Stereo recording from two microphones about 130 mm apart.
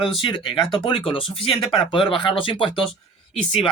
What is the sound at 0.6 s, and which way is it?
Speech, centre (ahead or behind).